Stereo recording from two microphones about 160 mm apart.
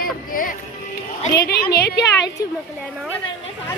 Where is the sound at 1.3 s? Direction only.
85° left.